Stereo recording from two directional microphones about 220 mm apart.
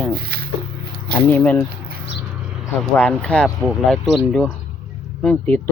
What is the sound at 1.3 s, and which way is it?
Speech, 10° left (ahead or behind).